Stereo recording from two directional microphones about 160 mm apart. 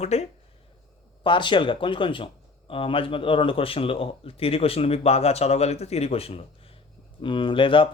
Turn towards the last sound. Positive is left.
turn(degrees=30)  # may be behind; listen again after turning